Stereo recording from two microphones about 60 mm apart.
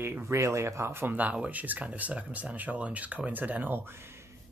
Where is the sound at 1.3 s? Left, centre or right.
Right.